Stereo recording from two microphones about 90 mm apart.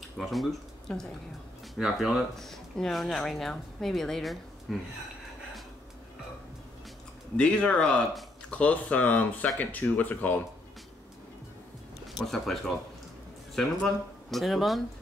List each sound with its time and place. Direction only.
0.2 s speech: centre (ahead or behind)
7.3 s speech: 10° left (ahead or behind)
12.2 s speech: centre (ahead or behind)
14.3 s speech: centre (ahead or behind)